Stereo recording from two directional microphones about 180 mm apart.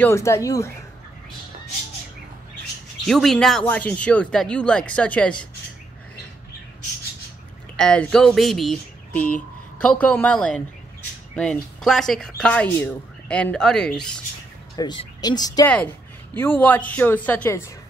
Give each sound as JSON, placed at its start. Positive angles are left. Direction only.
{"t": 0.0, "sound": "a woman's voice", "side_deg": 15}
{"t": 3.1, "sound": "speech", "side_deg": 0}
{"t": 7.7, "sound": "speech", "side_deg": 5}
{"t": 14.8, "sound": "speech", "side_deg": 20}
{"t": 15.6, "sound": "a woman's voice", "side_deg": 5}